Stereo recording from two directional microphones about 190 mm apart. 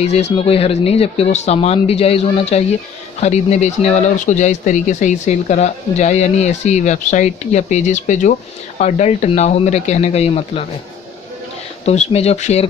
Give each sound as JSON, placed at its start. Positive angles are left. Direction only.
{"t": 0.0, "sound": "speech", "side_deg": 35}
{"t": 11.8, "sound": "speech", "side_deg": 35}